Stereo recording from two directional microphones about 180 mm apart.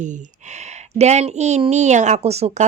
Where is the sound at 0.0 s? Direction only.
45° right (ahead or behind).